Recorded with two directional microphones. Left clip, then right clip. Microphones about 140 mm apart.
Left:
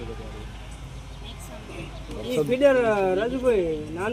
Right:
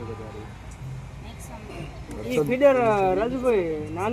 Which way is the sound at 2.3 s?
25° left (ahead or behind).